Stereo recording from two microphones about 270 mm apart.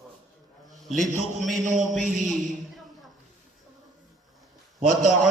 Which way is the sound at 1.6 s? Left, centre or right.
Right.